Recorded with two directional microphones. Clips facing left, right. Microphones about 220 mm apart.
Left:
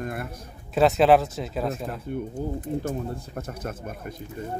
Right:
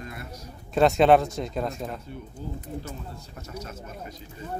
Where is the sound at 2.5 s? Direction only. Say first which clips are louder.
Left 8 dB; 50° left (ahead or behind).